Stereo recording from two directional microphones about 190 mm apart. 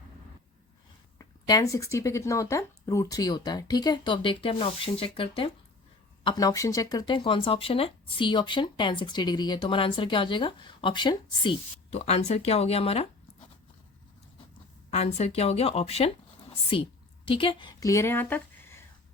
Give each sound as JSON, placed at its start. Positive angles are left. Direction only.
{"t": 1.2, "sound": "speech", "side_deg": 15}
{"t": 14.8, "sound": "speech", "side_deg": 35}